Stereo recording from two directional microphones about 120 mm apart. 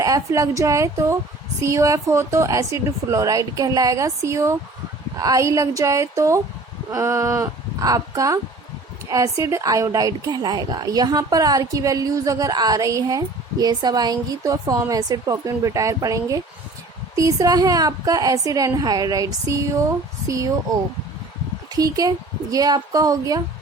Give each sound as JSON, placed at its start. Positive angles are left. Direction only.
{"t": 0.0, "sound": "a woman's voice", "side_deg": -30}
{"t": 21.7, "sound": "a woman's voice", "side_deg": -30}